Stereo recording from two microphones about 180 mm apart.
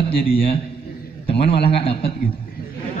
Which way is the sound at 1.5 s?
30° left (ahead or behind).